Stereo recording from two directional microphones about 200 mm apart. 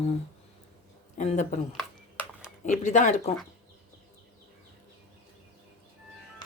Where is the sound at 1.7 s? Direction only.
5° right (ahead or behind).